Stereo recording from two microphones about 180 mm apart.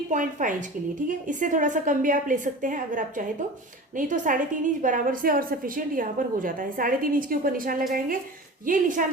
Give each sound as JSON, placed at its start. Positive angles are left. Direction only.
{"t": 0.1, "sound": "a woman's voice", "side_deg": -45}